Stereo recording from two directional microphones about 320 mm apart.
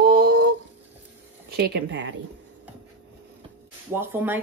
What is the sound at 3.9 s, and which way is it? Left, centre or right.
Speech, centre.